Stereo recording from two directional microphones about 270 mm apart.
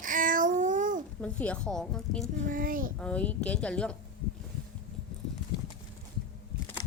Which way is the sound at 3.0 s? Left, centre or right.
Centre.